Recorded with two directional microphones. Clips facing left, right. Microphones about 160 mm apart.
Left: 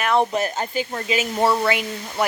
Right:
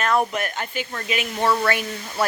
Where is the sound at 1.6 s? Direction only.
15° left (ahead or behind).